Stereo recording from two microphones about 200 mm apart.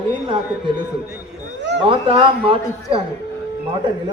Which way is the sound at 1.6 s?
60° right (ahead or behind).